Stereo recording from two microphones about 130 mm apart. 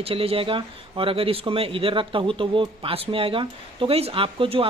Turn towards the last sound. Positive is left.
turn(degrees=-45)  # may be behind; listen again after turning